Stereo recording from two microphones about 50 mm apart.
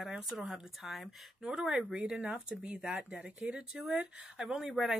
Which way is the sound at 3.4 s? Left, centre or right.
Centre.